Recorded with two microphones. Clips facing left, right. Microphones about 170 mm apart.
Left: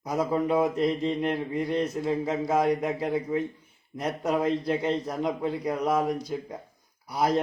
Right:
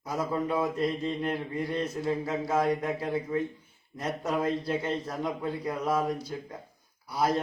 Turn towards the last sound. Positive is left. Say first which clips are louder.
# left 2 dB
turn(degrees=20)  # may be behind; listen again after turning